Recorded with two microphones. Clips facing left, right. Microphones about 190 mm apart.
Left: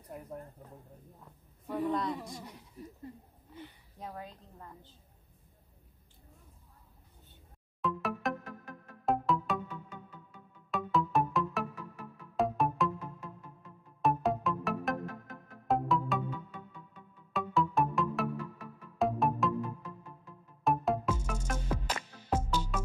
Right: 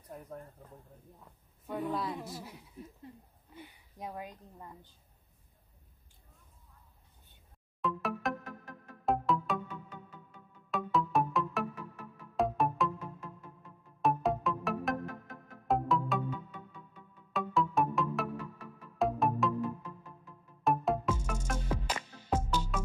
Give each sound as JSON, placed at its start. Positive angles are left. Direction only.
{"t": 0.1, "sound": "speech", "side_deg": 10}
{"t": 1.7, "sound": "a woman's voice", "side_deg": 0}
{"t": 7.8, "sound": "music", "side_deg": 0}
{"t": 10.7, "sound": "music", "side_deg": 0}
{"t": 14.0, "sound": "music", "side_deg": 0}
{"t": 17.3, "sound": "music", "side_deg": 0}
{"t": 20.6, "sound": "music", "side_deg": 0}
{"t": 21.6, "sound": "music", "side_deg": -10}
{"t": 22.3, "sound": "music", "side_deg": 10}